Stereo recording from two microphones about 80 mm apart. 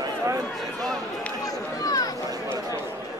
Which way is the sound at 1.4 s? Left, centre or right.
Left.